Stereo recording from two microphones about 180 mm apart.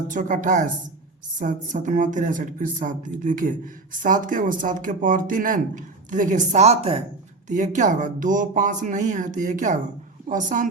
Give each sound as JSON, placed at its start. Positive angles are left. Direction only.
{"t": 0.1, "sound": "speech", "side_deg": -45}